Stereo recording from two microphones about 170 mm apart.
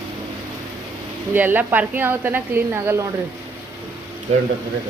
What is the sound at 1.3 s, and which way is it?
A woman's voice, 10° right (ahead or behind).